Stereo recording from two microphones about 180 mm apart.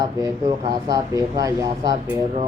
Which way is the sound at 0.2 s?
20° right (ahead or behind).